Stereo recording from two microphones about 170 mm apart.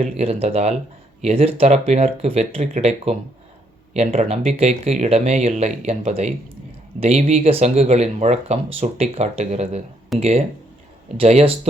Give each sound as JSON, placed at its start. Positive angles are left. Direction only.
{"t": 0.0, "sound": "speech", "side_deg": -35}